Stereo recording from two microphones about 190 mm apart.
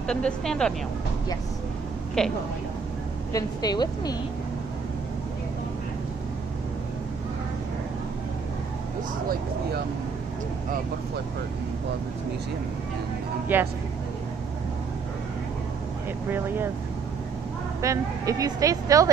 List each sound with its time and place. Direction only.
0.0 s speech: 5° left (ahead or behind)
2.2 s speech: 5° left (ahead or behind)
3.3 s a woman's voice: 20° left (ahead or behind)
13.5 s speech: 10° right (ahead or behind)
16.3 s speech: 10° right (ahead or behind)
17.8 s speech: 15° right (ahead or behind)